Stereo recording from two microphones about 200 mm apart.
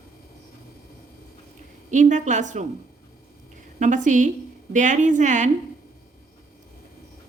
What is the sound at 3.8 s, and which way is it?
A woman's voice, 40° right (ahead or behind).